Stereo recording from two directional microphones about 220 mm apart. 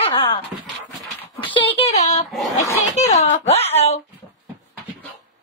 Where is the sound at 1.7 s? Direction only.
30° left (ahead or behind).